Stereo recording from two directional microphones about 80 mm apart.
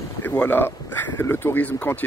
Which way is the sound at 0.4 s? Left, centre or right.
Left.